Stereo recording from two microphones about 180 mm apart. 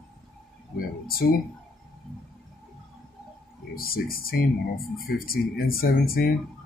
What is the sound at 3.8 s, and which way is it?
Speech, 55° left (ahead or behind).